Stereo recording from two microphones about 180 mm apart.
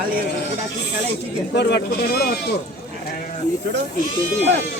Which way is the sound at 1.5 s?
70° left (ahead or behind).